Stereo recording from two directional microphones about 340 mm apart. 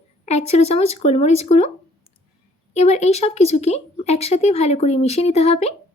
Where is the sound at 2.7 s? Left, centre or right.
Centre.